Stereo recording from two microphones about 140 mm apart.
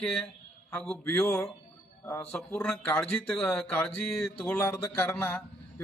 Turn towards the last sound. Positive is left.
turn(degrees=10)  # may be behind; listen again after turning